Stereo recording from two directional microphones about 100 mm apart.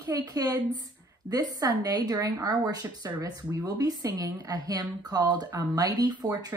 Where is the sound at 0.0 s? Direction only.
35° right (ahead or behind).